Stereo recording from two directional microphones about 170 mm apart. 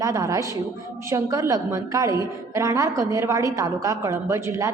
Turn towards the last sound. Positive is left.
turn(degrees=-15)  # may be behind; listen again after turning